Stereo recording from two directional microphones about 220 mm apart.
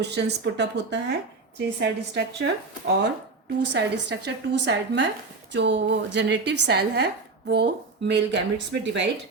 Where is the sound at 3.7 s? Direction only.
50° right (ahead or behind).